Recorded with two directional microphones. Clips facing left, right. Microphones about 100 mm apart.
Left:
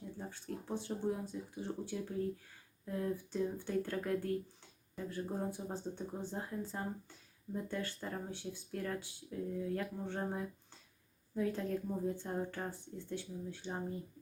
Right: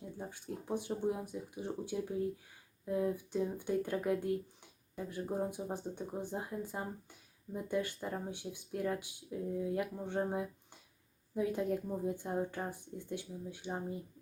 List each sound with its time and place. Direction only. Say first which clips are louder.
0.2 s speech: right 1 dB; 15° right (ahead or behind)